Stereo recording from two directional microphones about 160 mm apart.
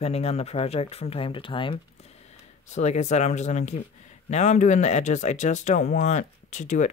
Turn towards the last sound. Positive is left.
turn(degrees=50)  # may be behind; listen again after turning